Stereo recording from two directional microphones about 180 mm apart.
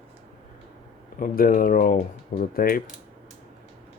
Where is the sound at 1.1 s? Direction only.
50° left (ahead or behind).